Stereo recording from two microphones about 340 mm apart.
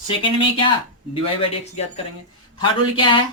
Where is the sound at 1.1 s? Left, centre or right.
Centre.